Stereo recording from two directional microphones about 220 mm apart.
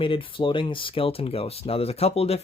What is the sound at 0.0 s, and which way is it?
Speech, 25° left (ahead or behind).